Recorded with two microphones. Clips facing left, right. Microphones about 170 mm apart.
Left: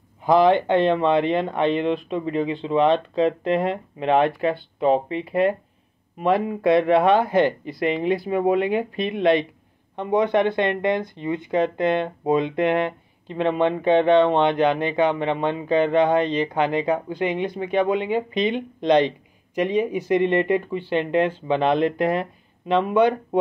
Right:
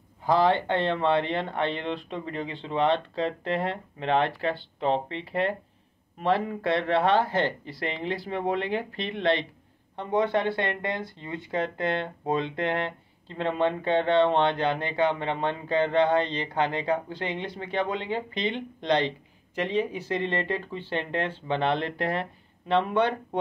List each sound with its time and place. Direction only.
0.2 s speech: 15° left (ahead or behind)